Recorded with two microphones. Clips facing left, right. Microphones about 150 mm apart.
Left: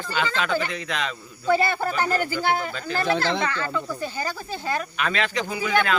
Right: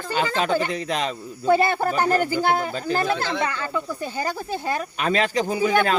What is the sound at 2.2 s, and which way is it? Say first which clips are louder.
Speech: right 4 dB; 20° right (ahead or behind).